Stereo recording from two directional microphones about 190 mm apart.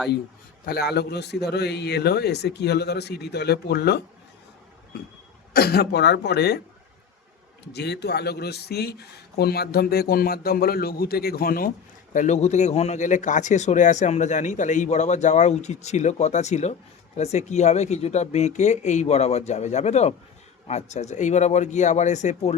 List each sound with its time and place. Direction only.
0.6 s speech: 55° left (ahead or behind)
5.5 s speech: 55° left (ahead or behind)
7.7 s speech: 60° left (ahead or behind)
12.1 s speech: 40° left (ahead or behind)